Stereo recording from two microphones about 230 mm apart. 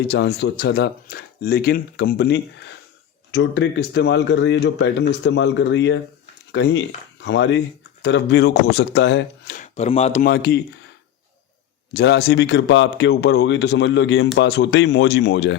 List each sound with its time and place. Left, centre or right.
0.1 s speech: left
9.6 s speech: left
10.2 s speech: left
11.9 s speech: left